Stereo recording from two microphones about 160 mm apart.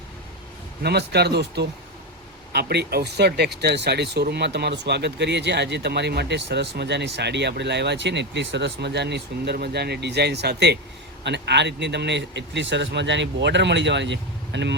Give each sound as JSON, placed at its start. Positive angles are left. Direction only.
{"t": 0.8, "sound": "speech", "side_deg": -90}